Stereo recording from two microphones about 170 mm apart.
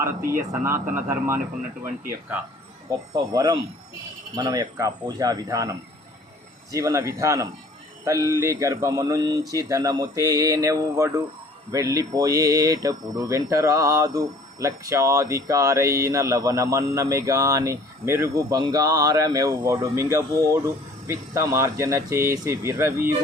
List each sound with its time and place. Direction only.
0.3 s speech: 15° right (ahead or behind)